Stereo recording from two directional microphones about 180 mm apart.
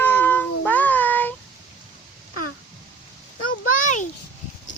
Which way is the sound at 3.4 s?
45° left (ahead or behind).